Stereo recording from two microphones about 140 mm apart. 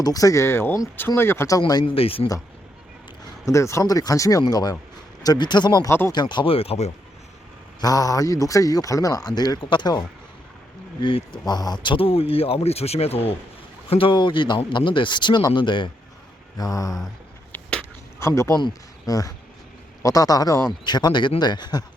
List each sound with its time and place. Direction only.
0.0 s a man's voice: 25° left (ahead or behind)
1.8 s speech: 40° left (ahead or behind)
3.4 s a man's voice: 20° left (ahead or behind)
5.9 s speech: 15° left (ahead or behind)
6.1 s speech: 35° left (ahead or behind)
7.8 s a man's voice: 25° left (ahead or behind)
17.5 s a sound: 10° left (ahead or behind)
18.2 s a man's voice: 20° left (ahead or behind)